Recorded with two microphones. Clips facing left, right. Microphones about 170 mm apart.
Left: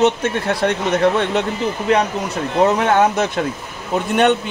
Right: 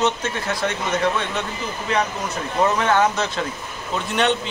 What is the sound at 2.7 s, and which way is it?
A man's voice, 55° left (ahead or behind).